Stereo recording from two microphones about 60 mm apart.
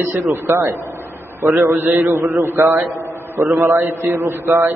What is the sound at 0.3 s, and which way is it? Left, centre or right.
Speech, right.